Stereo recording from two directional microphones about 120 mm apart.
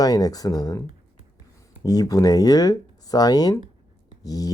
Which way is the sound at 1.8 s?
30° left (ahead or behind).